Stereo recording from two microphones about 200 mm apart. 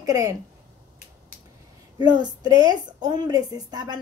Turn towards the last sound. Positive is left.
turn(degrees=-20)  # may be behind; listen again after turning